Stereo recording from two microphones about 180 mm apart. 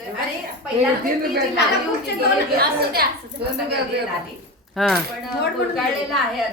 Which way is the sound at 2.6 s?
60° right (ahead or behind).